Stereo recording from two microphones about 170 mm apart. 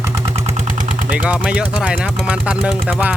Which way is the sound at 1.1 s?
10° right (ahead or behind).